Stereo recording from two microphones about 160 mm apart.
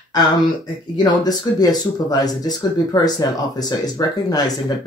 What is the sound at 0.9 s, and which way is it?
Speech, 25° left (ahead or behind).